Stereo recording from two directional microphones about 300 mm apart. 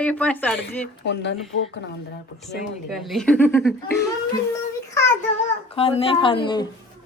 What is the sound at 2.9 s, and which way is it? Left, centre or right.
Speech, centre.